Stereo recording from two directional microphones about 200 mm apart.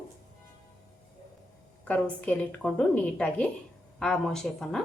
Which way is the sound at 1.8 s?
10° left (ahead or behind).